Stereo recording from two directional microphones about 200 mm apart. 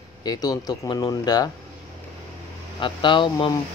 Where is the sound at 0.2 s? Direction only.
20° left (ahead or behind).